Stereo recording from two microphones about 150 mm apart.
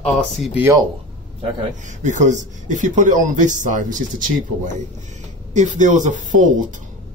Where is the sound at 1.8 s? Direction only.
55° right (ahead or behind).